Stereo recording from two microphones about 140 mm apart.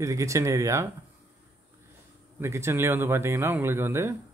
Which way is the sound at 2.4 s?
20° right (ahead or behind).